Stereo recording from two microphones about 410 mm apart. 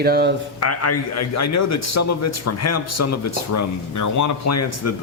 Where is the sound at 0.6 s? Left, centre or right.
Left.